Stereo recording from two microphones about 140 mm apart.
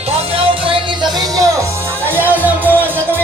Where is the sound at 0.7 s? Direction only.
30° right (ahead or behind).